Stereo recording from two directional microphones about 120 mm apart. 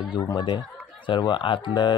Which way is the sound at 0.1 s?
40° left (ahead or behind).